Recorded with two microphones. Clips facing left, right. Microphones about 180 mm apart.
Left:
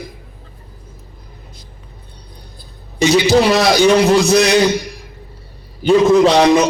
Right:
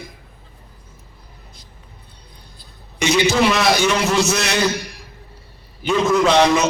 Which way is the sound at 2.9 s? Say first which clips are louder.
Left 5 dB; 35° left (ahead or behind).